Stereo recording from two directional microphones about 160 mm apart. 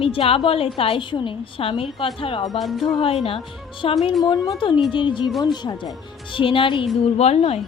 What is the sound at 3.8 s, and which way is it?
Speech, 35° left (ahead or behind).